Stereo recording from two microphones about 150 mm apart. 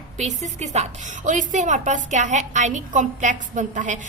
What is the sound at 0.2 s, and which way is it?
A woman's voice, 50° right (ahead or behind).